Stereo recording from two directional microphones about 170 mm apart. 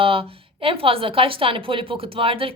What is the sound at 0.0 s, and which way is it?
Speech, 35° right (ahead or behind).